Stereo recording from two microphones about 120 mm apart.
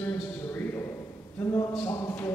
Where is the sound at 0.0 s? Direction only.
20° left (ahead or behind).